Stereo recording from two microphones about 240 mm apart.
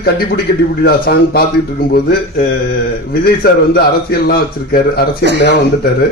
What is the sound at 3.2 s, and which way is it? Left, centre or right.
A man's voice, left.